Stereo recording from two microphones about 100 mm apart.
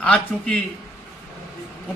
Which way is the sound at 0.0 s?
10° left (ahead or behind).